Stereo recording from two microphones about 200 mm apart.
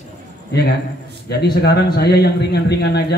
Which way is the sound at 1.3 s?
55° left (ahead or behind).